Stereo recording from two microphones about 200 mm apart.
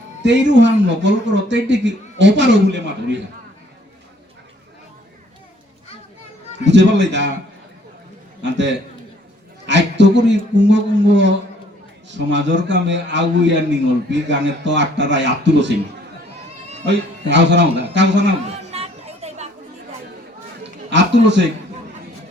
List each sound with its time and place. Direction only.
0.2 s a man's voice: 60° right (ahead or behind)
6.7 s a man's voice: 65° right (ahead or behind)
8.4 s a man's voice: 65° right (ahead or behind)
16.8 s a man's voice: 60° right (ahead or behind)
18.7 s children playing: 30° right (ahead or behind)
20.9 s a man's voice: 60° right (ahead or behind)